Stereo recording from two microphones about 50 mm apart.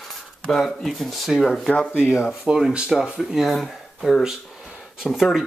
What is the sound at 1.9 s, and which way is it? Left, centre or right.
Speech, centre.